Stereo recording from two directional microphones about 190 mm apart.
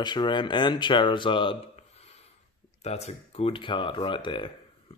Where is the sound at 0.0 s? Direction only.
25° left (ahead or behind).